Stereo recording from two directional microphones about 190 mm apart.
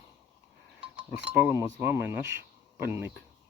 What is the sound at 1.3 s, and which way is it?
Speech, 10° right (ahead or behind).